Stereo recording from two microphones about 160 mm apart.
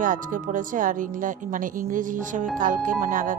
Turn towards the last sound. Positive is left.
turn(degrees=-60)  # may be behind; listen again after turning